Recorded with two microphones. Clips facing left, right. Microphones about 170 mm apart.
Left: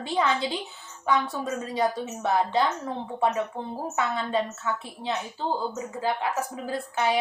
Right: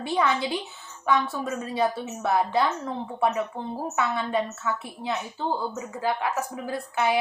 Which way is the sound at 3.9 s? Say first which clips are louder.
Even; 25° left (ahead or behind).